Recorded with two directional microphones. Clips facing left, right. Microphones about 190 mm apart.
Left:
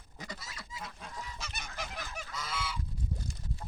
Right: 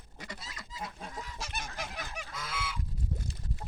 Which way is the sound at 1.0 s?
50° right (ahead or behind).